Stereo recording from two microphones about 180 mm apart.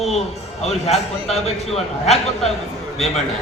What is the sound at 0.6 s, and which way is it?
A man's voice, 35° left (ahead or behind).